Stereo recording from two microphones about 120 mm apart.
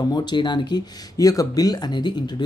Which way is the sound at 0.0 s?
35° left (ahead or behind).